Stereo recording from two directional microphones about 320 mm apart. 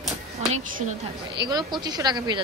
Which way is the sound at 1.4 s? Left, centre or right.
Centre.